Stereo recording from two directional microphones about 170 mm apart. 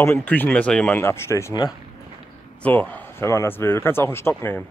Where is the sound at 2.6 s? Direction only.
10° left (ahead or behind).